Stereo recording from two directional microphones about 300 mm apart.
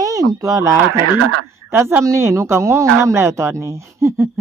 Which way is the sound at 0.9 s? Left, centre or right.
Right.